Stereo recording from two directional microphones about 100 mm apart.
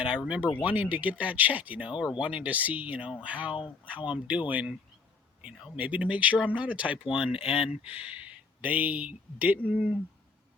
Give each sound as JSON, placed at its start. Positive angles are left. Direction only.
{"t": 0.0, "sound": "speech", "side_deg": -10}
{"t": 7.7, "sound": "speech", "side_deg": 80}
{"t": 7.9, "sound": "speech", "side_deg": -15}